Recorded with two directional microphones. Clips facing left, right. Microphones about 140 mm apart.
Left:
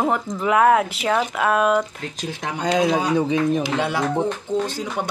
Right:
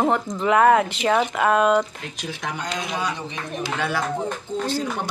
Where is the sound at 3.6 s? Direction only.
20° left (ahead or behind).